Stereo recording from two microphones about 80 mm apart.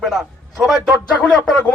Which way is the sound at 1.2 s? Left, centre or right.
Centre.